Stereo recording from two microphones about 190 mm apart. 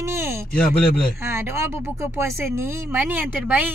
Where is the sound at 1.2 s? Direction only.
15° right (ahead or behind).